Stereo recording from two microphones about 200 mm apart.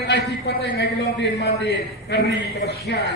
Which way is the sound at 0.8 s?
55° left (ahead or behind).